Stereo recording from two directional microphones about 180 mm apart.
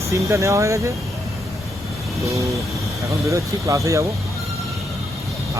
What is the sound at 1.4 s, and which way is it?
Vehicle, centre (ahead or behind).